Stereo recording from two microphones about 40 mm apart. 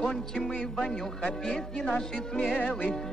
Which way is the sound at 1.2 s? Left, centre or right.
Centre.